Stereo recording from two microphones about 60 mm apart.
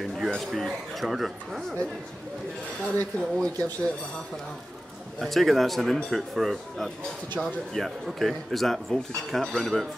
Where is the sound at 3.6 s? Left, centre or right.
Left.